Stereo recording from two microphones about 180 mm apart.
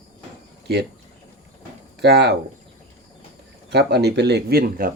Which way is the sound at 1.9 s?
70° right (ahead or behind).